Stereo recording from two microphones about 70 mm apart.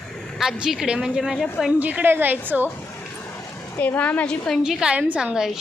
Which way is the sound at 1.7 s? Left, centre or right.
Right.